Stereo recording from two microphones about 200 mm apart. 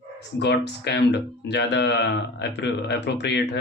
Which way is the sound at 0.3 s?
60° left (ahead or behind).